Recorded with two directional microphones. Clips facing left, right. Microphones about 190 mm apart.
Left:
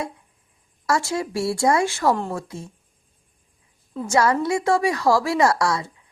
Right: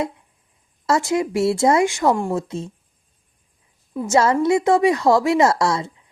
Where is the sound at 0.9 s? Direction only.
20° right (ahead or behind).